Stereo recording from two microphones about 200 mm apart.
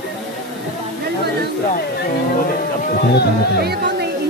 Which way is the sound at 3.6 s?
55° right (ahead or behind).